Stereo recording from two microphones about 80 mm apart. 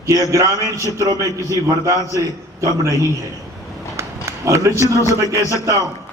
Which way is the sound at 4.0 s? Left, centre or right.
Right.